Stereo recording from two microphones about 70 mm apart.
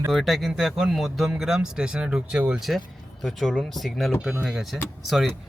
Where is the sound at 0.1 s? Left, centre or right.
Centre.